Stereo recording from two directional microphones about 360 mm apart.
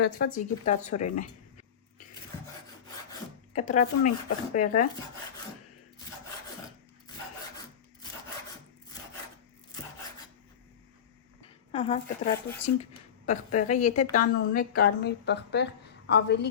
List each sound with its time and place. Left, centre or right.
0.0 s speech: left
3.1 s speech: centre
11.7 s speech: centre